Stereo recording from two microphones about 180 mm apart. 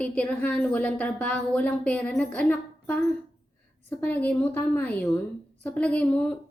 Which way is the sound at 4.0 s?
10° left (ahead or behind).